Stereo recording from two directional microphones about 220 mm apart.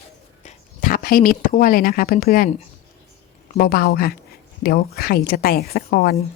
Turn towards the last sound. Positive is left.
turn(degrees=40)  # may be behind; listen again after turning